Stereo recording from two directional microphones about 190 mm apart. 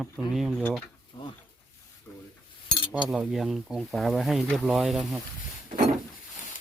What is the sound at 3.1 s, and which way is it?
Speech, 5° right (ahead or behind).